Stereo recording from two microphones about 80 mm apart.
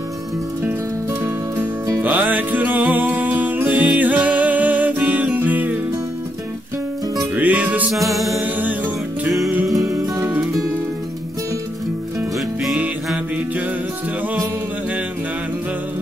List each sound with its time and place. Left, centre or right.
2.0 s music: right
7.3 s music: right
7.9 s music: centre
8.4 s music: right
9.8 s music: right
12.7 s music: centre